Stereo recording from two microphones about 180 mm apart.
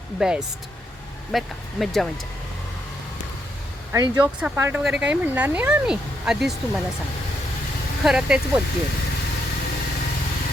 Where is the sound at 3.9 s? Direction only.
20° right (ahead or behind).